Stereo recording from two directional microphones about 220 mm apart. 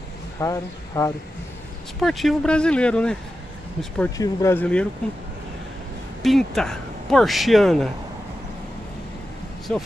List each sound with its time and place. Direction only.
0.4 s speech: 15° left (ahead or behind)
2.0 s speech: centre (ahead or behind)
6.2 s speech: centre (ahead or behind)
9.7 s speech: 5° left (ahead or behind)